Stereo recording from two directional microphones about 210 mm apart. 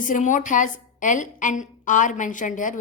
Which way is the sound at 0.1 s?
35° left (ahead or behind).